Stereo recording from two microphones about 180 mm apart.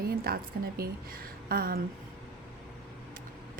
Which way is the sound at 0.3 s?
55° right (ahead or behind).